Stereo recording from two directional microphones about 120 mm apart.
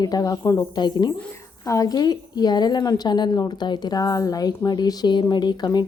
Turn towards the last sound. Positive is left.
turn(degrees=35)  # may be behind; listen again after turning